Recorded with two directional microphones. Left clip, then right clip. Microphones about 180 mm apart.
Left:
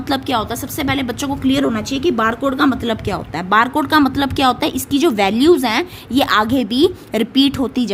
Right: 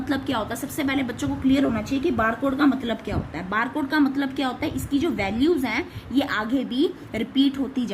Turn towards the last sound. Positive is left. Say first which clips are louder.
# left 7 dB
turn(degrees=50)  # may be behind; listen again after turning